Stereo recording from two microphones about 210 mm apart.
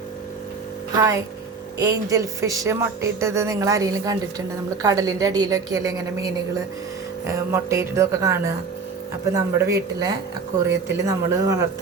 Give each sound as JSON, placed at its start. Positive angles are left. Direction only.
{"t": 0.9, "sound": "speech", "side_deg": -15}